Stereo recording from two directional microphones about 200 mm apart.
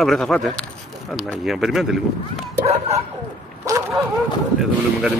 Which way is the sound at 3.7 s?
15° right (ahead or behind).